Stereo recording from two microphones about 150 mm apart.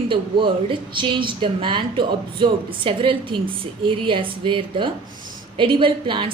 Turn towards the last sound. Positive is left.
turn(degrees=-35)  # may be behind; listen again after turning